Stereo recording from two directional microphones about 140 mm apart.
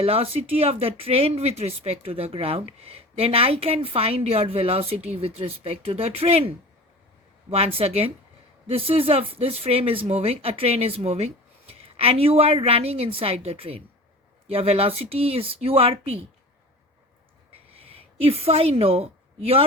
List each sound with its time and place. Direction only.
0.0 s speech: 45° right (ahead or behind)
7.5 s speech: 45° right (ahead or behind)
17.7 s a woman's voice: 45° right (ahead or behind)